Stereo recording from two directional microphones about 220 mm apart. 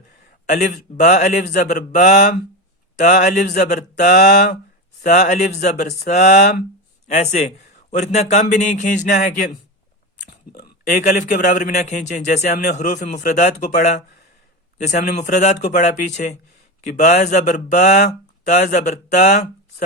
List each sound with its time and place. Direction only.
0.4 s a man's voice: 35° left (ahead or behind)
5.0 s a man's voice: 35° left (ahead or behind)
10.9 s a man's voice: 35° left (ahead or behind)
14.8 s a man's voice: 35° left (ahead or behind)